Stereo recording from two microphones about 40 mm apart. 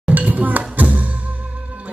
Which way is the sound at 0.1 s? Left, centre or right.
Right.